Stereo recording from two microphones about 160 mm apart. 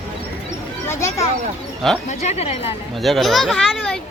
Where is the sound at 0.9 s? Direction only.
20° left (ahead or behind).